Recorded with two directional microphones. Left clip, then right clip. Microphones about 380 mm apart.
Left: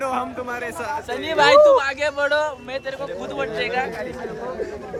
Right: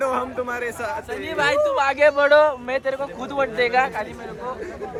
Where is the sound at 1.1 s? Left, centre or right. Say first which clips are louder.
Left 7 dB; left.